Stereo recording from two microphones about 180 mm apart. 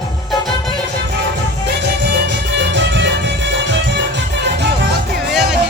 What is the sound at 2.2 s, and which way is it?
Music, 75° right (ahead or behind).